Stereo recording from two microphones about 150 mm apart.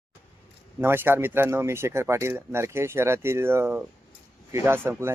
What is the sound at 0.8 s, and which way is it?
Speech, 15° right (ahead or behind).